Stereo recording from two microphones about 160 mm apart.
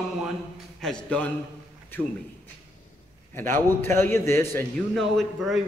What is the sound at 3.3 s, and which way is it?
A man's voice, 15° left (ahead or behind).